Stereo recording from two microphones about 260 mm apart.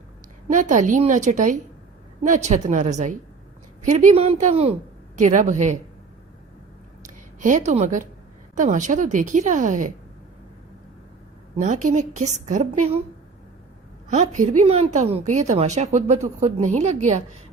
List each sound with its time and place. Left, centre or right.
0.4 s speech: right
7.1 s a woman's voice: right
11.5 s speech: right
14.1 s speech: right